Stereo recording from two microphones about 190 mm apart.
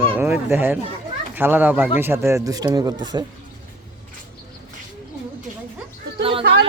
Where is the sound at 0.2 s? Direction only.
10° right (ahead or behind).